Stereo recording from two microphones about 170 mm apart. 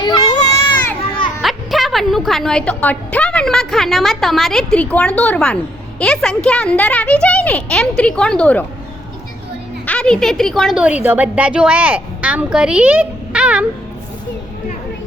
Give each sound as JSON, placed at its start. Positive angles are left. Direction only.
{"t": 0.0, "sound": "baby cry", "side_deg": 25}
{"t": 1.4, "sound": "a woman's voice", "side_deg": 0}
{"t": 9.8, "sound": "a woman's voice", "side_deg": 5}